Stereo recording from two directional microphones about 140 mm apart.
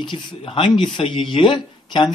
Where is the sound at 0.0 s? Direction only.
35° left (ahead or behind).